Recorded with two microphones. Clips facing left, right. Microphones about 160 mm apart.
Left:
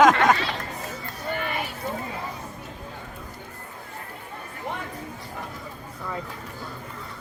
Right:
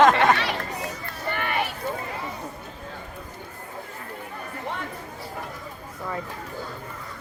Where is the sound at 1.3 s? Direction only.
65° right (ahead or behind).